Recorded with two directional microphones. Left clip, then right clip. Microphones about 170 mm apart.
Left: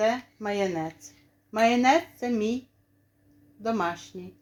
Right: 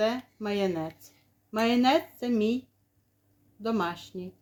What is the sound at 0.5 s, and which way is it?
Speech, 45° right (ahead or behind).